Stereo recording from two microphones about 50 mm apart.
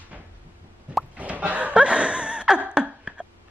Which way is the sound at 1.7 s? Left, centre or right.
Centre.